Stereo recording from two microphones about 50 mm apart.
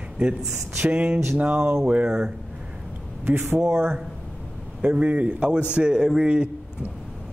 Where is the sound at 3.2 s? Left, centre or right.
Right.